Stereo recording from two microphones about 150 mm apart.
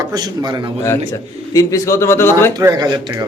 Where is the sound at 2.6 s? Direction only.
25° right (ahead or behind).